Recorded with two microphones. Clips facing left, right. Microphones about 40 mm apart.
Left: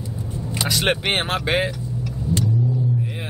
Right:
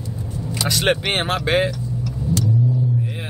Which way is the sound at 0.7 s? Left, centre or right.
Centre.